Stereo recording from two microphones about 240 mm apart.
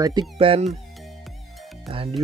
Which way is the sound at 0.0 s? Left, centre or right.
Centre.